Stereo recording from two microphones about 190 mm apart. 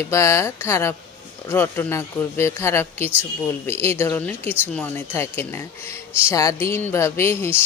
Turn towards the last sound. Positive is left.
turn(degrees=15)  # may be behind; listen again after turning